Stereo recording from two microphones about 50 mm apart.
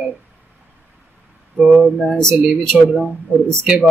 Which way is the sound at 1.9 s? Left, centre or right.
Centre.